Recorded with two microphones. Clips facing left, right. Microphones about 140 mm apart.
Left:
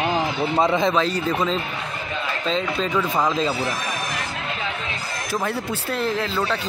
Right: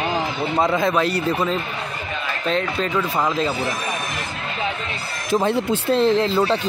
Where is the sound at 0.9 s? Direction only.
10° right (ahead or behind).